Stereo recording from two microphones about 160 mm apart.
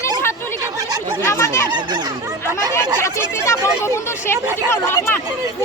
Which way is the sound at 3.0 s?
20° left (ahead or behind).